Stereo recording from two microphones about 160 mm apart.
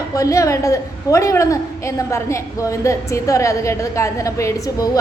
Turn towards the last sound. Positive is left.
turn(degrees=20)  # may be behind; listen again after turning